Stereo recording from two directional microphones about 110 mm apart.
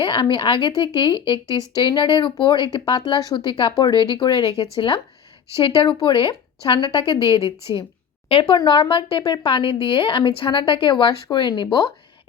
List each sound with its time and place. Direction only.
0.0 s speech: 45° left (ahead or behind)